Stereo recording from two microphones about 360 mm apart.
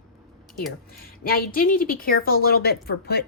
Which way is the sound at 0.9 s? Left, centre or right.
Left.